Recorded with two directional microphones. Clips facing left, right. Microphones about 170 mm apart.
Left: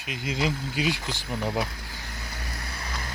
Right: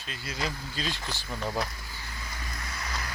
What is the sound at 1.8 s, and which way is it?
Vehicle, 75° left (ahead or behind).